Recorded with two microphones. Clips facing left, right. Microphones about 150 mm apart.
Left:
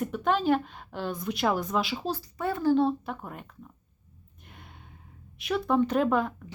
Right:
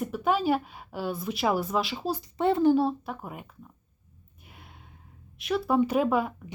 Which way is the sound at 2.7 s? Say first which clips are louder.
Even; 5° right (ahead or behind).